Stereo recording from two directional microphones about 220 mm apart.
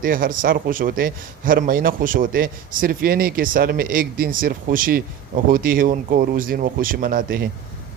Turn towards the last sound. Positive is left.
turn(degrees=-40)  # may be behind; listen again after turning